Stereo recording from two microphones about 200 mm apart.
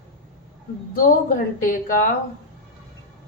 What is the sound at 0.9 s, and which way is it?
A woman's voice, 45° left (ahead or behind).